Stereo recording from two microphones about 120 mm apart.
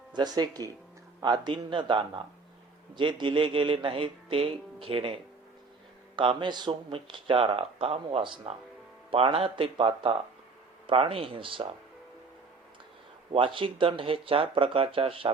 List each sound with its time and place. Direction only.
0.1 s speech: 35° right (ahead or behind)
6.1 s speech: 40° right (ahead or behind)
13.3 s speech: 45° right (ahead or behind)